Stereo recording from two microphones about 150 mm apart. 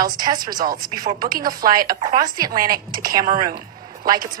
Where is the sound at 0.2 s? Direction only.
25° right (ahead or behind).